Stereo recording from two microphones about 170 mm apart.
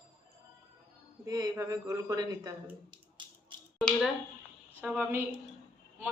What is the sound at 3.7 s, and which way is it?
Speech, centre (ahead or behind).